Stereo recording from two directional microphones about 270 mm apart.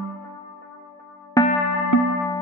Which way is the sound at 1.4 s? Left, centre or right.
Centre.